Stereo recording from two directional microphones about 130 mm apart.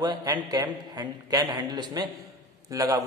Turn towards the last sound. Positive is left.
turn(degrees=-25)  # may be behind; listen again after turning